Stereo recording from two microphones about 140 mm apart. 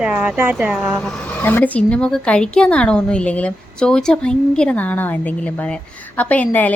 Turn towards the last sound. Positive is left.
turn(degrees=10)  # may be behind; listen again after turning